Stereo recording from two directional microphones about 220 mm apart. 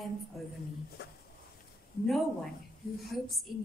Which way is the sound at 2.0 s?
Centre (ahead or behind).